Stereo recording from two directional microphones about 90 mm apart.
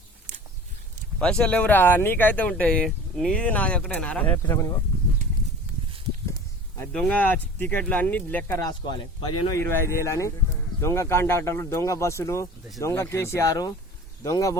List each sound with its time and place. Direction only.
1.2 s speech: 10° left (ahead or behind)
6.9 s speech: 10° left (ahead or behind)
8.6 s speech: 55° left (ahead or behind)
9.5 s speech: 30° left (ahead or behind)
13.5 s speech: 45° left (ahead or behind)